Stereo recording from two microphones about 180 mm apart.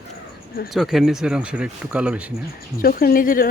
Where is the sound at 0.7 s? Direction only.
Centre (ahead or behind).